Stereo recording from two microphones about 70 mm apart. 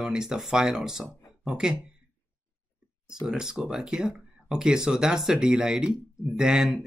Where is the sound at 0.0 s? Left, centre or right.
Centre.